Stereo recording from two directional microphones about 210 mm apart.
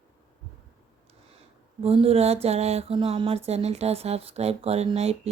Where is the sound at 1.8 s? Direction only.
25° right (ahead or behind).